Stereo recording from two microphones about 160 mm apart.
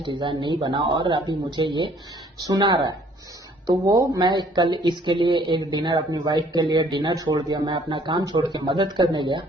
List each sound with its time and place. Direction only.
0.0 s a woman's voice: 30° right (ahead or behind)